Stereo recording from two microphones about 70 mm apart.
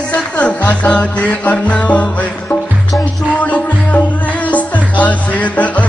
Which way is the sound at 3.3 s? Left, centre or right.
Left.